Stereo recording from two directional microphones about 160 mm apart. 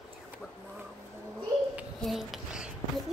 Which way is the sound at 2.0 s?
Centre (ahead or behind).